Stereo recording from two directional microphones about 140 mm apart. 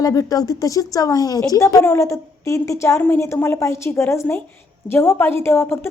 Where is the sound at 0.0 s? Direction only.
25° left (ahead or behind).